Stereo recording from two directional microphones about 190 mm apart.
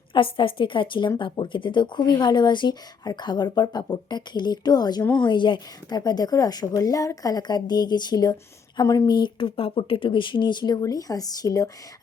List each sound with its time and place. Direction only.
0.1 s a woman's voice: 25° left (ahead or behind)